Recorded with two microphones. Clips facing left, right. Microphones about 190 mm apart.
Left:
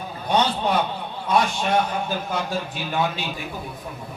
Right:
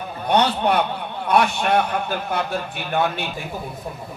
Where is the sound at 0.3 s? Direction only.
60° right (ahead or behind).